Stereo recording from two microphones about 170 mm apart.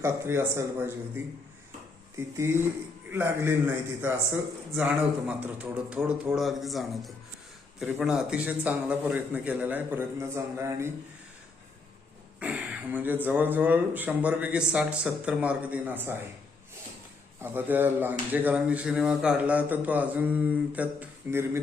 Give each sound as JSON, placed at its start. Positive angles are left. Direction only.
{"t": 0.0, "sound": "speech", "side_deg": -15}
{"t": 4.7, "sound": "a man's voice", "side_deg": -5}
{"t": 12.4, "sound": "a sound", "side_deg": -5}
{"t": 13.2, "sound": "speech", "side_deg": -10}
{"t": 17.4, "sound": "speech", "side_deg": -10}